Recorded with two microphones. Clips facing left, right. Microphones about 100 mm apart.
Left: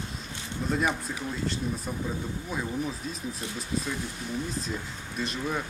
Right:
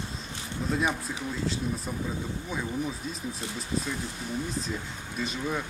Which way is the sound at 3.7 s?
35° right (ahead or behind).